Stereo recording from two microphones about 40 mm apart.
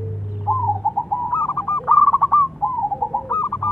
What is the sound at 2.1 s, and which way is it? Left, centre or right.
Bird, centre.